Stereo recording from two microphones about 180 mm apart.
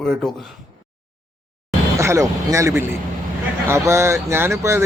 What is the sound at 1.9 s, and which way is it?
Speech, 15° right (ahead or behind).